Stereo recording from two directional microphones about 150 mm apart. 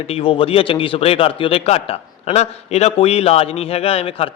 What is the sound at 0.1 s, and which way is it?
Speech, 35° left (ahead or behind).